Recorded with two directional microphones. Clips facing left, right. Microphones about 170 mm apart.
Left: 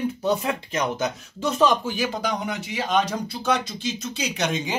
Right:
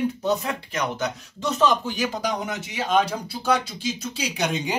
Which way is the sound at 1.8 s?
Centre (ahead or behind).